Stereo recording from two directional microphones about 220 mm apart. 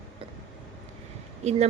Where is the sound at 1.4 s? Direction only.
30° right (ahead or behind).